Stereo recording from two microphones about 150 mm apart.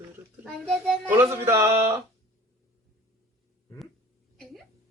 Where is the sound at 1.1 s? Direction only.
15° right (ahead or behind).